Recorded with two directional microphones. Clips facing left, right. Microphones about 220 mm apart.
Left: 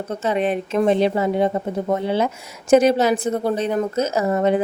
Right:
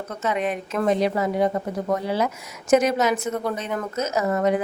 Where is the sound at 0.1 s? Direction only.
30° left (ahead or behind).